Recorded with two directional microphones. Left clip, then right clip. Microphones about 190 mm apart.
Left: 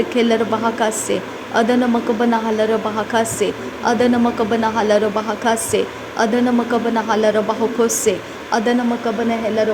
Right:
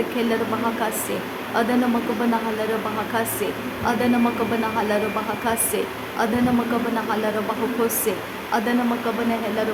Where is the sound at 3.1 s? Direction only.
25° left (ahead or behind).